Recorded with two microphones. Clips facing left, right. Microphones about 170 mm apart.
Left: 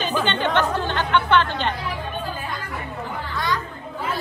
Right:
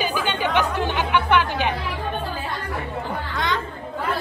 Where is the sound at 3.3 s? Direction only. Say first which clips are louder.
Even; 20° right (ahead or behind).